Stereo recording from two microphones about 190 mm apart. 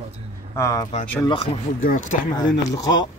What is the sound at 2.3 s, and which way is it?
Speech, 20° left (ahead or behind).